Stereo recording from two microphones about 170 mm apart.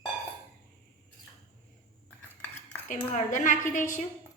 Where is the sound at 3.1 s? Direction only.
50° left (ahead or behind).